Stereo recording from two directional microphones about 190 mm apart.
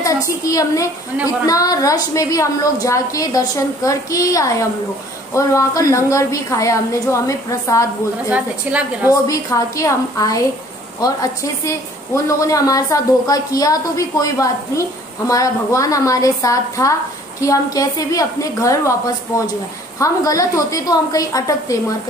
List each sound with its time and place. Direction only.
0.0 s a woman's voice: 15° left (ahead or behind)
8.3 s a woman's voice: 10° right (ahead or behind)
9.3 s a woman's voice: 15° left (ahead or behind)
11.6 s a woman's voice: 15° left (ahead or behind)